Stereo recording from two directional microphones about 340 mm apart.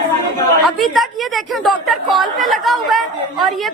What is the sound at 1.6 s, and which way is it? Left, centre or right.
A woman's voice, centre.